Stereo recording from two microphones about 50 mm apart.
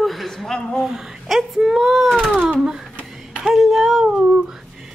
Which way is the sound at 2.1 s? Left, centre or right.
Centre.